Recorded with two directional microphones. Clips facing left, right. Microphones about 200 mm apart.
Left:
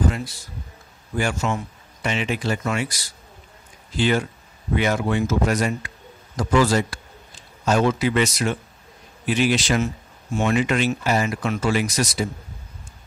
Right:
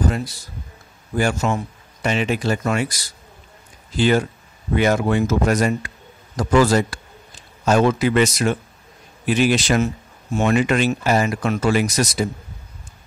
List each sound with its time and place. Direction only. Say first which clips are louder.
1.1 s speech: right 4 dB; 40° right (ahead or behind)